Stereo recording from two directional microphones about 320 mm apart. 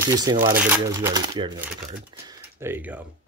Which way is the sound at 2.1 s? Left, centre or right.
Centre.